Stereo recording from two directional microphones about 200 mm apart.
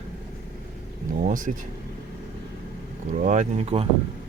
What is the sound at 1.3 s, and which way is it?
Speech, 40° right (ahead or behind).